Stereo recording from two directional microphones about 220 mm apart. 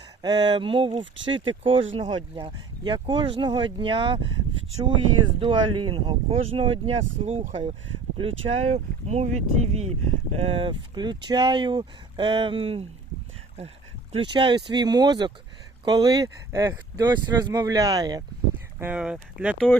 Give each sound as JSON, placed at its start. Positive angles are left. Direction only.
{"t": 0.2, "sound": "speech", "side_deg": -20}
{"t": 5.4, "sound": "speech", "side_deg": -20}
{"t": 14.1, "sound": "speech", "side_deg": -20}
{"t": 18.8, "sound": "speech", "side_deg": -5}